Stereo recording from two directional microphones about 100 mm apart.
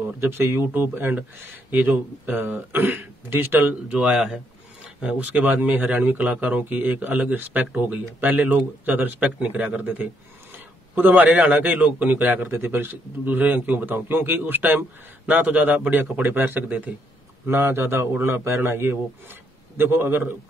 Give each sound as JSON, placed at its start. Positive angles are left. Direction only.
{"t": 0.2, "sound": "speech", "side_deg": -25}